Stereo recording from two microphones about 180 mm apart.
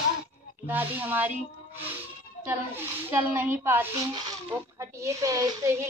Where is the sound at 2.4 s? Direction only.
10° right (ahead or behind).